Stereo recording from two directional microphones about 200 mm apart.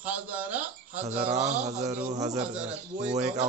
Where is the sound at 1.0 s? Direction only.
35° right (ahead or behind).